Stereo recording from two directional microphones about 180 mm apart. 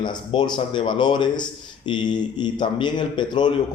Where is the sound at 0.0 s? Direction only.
25° left (ahead or behind).